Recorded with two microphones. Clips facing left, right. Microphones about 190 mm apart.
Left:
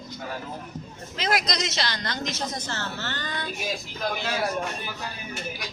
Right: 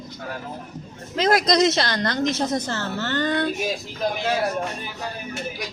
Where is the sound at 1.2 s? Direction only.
50° right (ahead or behind).